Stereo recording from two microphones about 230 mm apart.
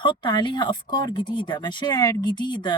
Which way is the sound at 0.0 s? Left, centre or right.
Left.